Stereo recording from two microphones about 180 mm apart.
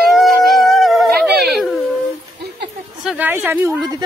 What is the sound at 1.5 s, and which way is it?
Wail, centre (ahead or behind).